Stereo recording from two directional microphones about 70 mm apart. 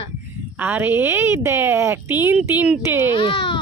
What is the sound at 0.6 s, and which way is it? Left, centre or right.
A woman's voice, right.